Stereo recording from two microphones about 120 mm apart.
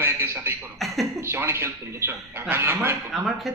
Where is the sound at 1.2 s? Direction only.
20° right (ahead or behind).